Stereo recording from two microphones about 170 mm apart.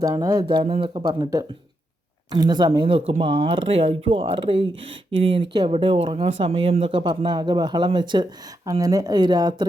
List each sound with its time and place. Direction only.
0.0 s speech: 20° right (ahead or behind)
0.4 s speech: 30° right (ahead or behind)
4.7 s speech: 90° right
5.2 s speech: 30° right (ahead or behind)